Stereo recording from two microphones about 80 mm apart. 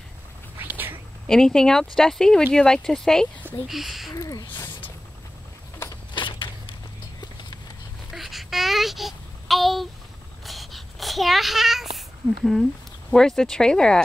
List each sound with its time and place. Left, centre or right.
0.6 s cat: right
1.2 s speech: centre
4.1 s speech: left
6.1 s a sound: left
8.1 s child singing: centre
10.4 s a sound: centre
13.4 s speech: centre